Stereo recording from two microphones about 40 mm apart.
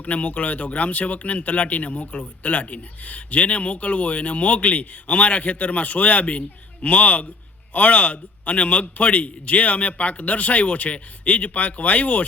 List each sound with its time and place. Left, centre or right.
0.0 s speech: left